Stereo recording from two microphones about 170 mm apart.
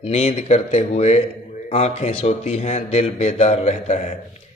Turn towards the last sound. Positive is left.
turn(degrees=40)  # may be behind; listen again after turning